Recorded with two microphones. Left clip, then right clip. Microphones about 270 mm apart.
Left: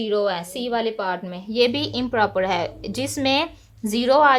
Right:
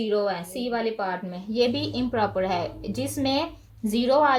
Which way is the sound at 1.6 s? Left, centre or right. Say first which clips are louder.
Left 4 dB; left.